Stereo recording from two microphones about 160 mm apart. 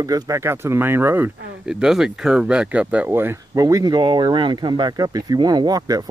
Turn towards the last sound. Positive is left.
turn(degrees=-25)  # may be behind; listen again after turning